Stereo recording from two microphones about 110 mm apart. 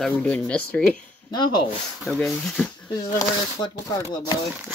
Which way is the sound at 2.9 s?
40° left (ahead or behind).